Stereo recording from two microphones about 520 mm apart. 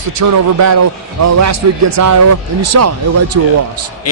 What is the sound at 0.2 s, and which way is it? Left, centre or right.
Speech, right.